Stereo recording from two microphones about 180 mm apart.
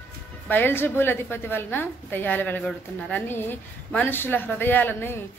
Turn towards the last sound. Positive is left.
turn(degrees=10)  # may be behind; listen again after turning